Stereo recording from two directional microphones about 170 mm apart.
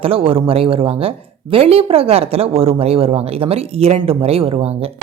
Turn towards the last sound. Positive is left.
turn(degrees=-35)  # may be behind; listen again after turning